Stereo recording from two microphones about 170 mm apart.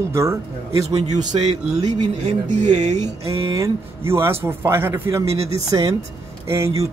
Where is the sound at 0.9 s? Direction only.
40° right (ahead or behind).